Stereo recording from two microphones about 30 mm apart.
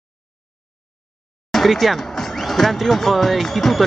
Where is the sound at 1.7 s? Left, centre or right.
Centre.